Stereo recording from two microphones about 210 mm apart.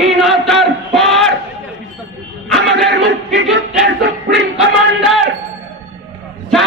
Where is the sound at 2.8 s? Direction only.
Centre (ahead or behind).